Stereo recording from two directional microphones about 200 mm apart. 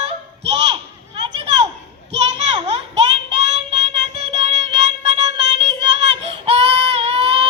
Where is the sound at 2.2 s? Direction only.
30° right (ahead or behind).